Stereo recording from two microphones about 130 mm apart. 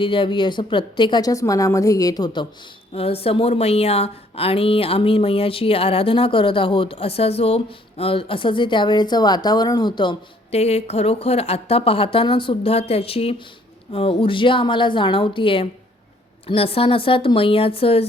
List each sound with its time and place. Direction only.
0.0 s a woman's voice: 40° left (ahead or behind)
2.9 s a woman's voice: 50° left (ahead or behind)
10.5 s a woman's voice: 55° left (ahead or behind)